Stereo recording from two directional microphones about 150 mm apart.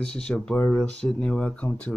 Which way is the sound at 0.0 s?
5° left (ahead or behind).